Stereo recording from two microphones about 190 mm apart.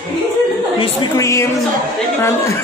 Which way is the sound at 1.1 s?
15° left (ahead or behind).